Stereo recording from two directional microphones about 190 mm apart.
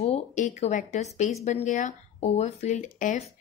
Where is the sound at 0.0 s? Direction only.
35° left (ahead or behind).